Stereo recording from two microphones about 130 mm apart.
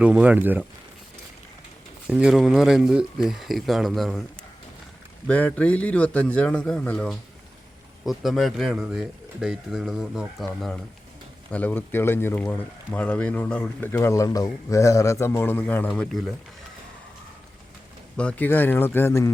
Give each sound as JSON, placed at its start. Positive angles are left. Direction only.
{"t": 0.0, "sound": "speech", "side_deg": -10}
{"t": 2.0, "sound": "speech", "side_deg": -10}
{"t": 5.3, "sound": "speech", "side_deg": 10}
{"t": 11.5, "sound": "speech", "side_deg": 15}
{"t": 18.2, "sound": "speech", "side_deg": 10}